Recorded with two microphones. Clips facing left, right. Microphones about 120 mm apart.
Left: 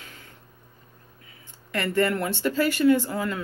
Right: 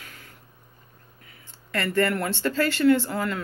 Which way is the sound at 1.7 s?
20° left (ahead or behind).